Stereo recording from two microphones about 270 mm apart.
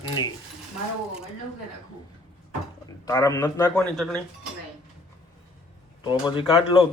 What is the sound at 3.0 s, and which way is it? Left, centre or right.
A man's voice, centre.